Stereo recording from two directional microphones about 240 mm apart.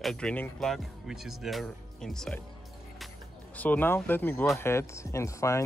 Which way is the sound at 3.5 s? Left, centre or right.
Centre.